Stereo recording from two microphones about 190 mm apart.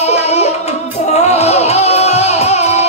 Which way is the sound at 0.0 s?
35° left (ahead or behind).